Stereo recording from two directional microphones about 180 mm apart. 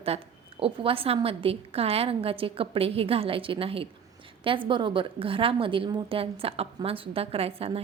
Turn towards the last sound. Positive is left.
turn(degrees=-30)  # may be behind; listen again after turning